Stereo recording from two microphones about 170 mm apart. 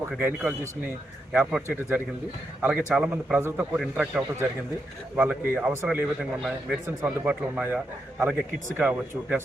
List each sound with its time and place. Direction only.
0.2 s a man's voice: 10° right (ahead or behind)